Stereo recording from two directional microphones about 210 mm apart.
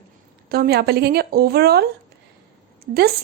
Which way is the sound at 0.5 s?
50° right (ahead or behind).